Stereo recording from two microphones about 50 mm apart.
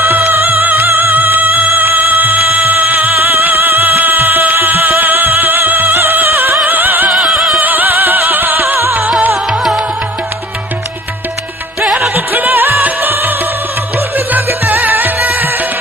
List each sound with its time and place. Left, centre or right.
0.3 s music: right
7.1 s music: centre
7.6 s music: right
12.1 s music: right